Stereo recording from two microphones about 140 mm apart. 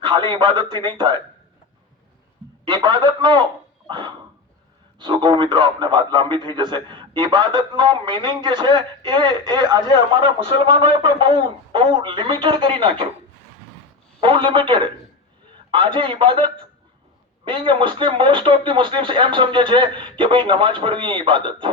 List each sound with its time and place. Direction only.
0.0 s a man's voice: 35° right (ahead or behind)
2.6 s a man's voice: 30° right (ahead or behind)
3.8 s a sound: 35° right (ahead or behind)
4.9 s a man's voice: 30° right (ahead or behind)
14.2 s a man's voice: 35° right (ahead or behind)